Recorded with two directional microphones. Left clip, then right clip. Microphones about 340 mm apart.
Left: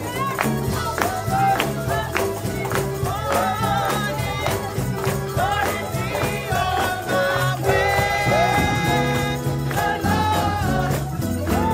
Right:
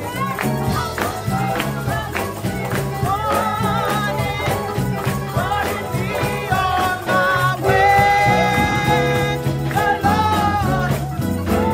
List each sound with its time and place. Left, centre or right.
7.2 s music: centre